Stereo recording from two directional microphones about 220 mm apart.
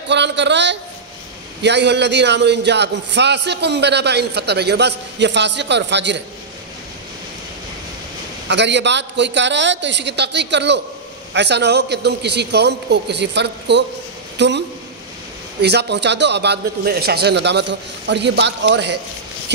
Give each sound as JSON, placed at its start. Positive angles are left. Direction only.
{"t": 0.1, "sound": "a man's voice", "side_deg": -50}
{"t": 8.5, "sound": "a man's voice", "side_deg": -55}
{"t": 14.3, "sound": "a sound", "side_deg": -50}
{"t": 15.6, "sound": "a man's voice", "side_deg": -50}